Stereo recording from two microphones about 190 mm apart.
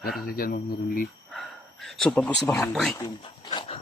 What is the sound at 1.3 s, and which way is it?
Speech, centre (ahead or behind).